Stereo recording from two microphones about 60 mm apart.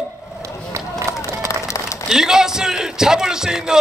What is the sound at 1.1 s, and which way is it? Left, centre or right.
Run, right.